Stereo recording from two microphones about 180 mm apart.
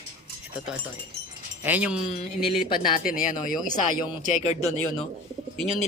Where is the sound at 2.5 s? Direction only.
50° left (ahead or behind).